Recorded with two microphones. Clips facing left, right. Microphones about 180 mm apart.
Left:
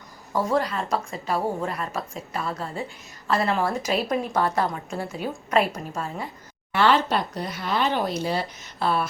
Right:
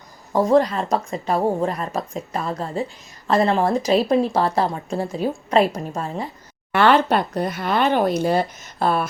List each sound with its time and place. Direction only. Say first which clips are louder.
0.3 s speech: right 7 dB; 40° right (ahead or behind)
6.7 s speech: right 4 dB; 55° right (ahead or behind)